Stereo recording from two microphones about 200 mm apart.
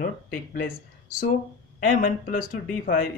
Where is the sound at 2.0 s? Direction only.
45° left (ahead or behind).